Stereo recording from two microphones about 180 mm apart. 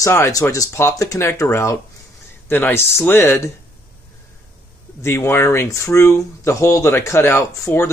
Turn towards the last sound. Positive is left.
turn(degrees=15)  # may be behind; listen again after turning